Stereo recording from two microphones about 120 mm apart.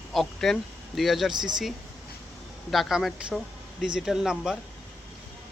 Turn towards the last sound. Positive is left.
turn(degrees=-5)  # may be behind; listen again after turning